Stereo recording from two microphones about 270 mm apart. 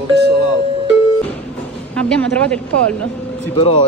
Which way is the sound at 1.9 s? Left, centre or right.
Centre.